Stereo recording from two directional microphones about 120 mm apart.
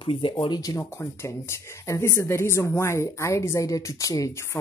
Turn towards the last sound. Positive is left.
turn(degrees=25)  # may be behind; listen again after turning